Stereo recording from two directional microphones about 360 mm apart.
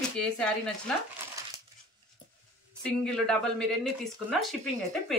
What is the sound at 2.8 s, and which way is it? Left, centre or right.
Speech, centre.